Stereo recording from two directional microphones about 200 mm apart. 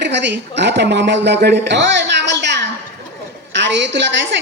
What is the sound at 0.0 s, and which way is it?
A woman's voice, 60° right (ahead or behind).